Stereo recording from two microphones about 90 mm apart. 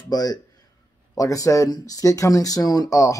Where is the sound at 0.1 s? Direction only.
45° left (ahead or behind).